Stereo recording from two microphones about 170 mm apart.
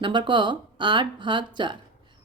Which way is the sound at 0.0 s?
25° right (ahead or behind).